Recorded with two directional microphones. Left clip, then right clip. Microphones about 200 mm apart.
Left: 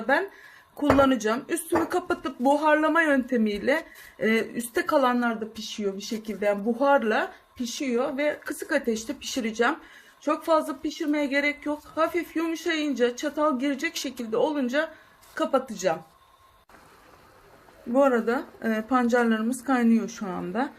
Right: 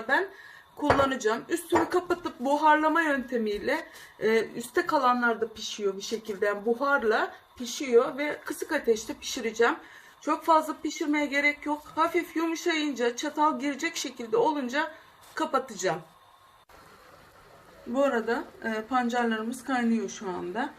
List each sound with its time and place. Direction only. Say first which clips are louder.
0.8 s speech: left 3 dB; 55° left (ahead or behind)
17.9 s a woman's voice: left 4 dB; 55° left (ahead or behind)